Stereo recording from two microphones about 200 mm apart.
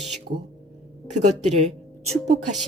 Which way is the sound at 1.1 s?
35° right (ahead or behind).